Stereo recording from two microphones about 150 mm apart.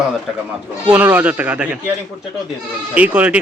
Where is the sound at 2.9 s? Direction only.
10° right (ahead or behind).